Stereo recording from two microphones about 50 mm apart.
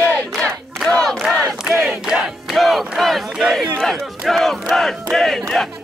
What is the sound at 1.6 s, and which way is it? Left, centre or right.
Crowd, centre.